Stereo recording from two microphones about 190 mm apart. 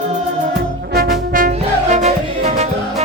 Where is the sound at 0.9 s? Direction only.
45° right (ahead or behind).